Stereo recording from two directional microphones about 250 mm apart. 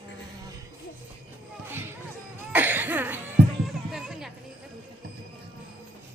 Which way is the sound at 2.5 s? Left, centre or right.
Centre.